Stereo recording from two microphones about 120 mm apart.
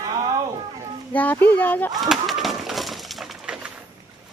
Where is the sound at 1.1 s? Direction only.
15° left (ahead or behind).